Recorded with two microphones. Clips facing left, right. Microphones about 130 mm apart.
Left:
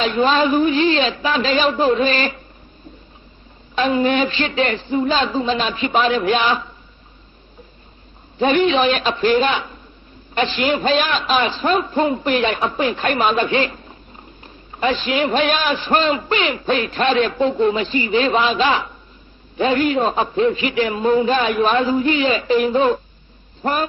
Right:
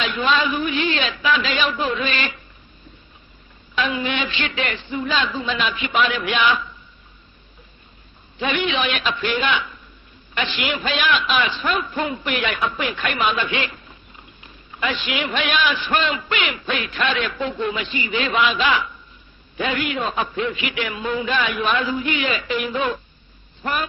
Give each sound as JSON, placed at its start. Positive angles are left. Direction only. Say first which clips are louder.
{"t": 0.0, "sound": "a man's voice", "louder": "left 5 dB", "side_deg": 35}
{"t": 3.8, "sound": "a man's voice", "louder": "left 7 dB", "side_deg": 35}
{"t": 8.4, "sound": "a man's voice", "louder": "left 7 dB", "side_deg": 35}